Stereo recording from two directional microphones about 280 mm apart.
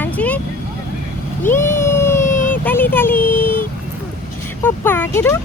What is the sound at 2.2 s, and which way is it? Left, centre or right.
Vehicle, left.